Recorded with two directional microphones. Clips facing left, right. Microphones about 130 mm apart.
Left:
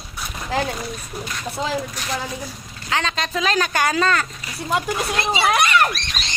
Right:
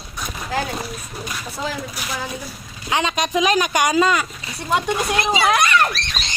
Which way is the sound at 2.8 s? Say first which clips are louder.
Right 3 dB; 15° right (ahead or behind).